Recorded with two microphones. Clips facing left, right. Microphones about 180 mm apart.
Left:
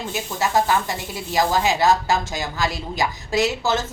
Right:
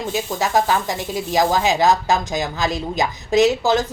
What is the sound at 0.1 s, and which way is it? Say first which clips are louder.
A woman's voice: right 2 dB; 15° right (ahead or behind).